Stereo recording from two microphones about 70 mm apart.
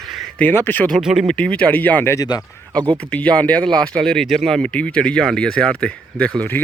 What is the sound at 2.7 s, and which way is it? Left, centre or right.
Speech, right.